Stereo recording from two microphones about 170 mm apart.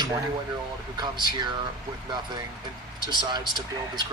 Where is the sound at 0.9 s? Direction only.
25° right (ahead or behind).